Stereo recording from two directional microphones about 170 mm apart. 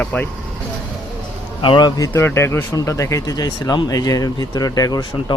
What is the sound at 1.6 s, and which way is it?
A man's voice, 25° left (ahead or behind).